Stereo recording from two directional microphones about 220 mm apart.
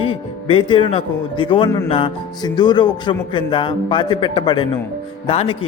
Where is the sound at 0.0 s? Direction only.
25° left (ahead or behind).